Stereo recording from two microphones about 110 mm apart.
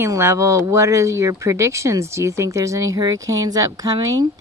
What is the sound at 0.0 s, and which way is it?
Speech, 25° right (ahead or behind).